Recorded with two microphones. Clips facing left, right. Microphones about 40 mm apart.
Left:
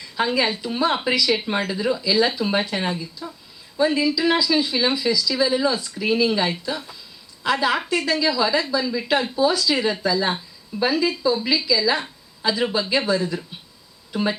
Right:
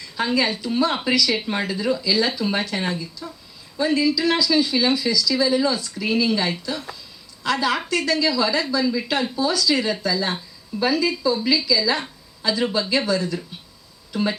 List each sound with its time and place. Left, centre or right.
0.2 s speech: centre